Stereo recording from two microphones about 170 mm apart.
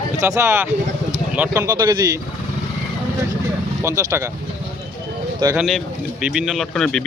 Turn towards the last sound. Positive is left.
turn(degrees=5)  # may be behind; listen again after turning